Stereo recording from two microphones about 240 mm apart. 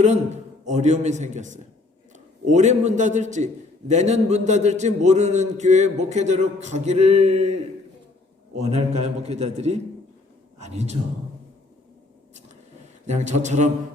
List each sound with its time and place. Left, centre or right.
0.6 s a man's voice: right
8.5 s a man's voice: right
13.1 s a man's voice: right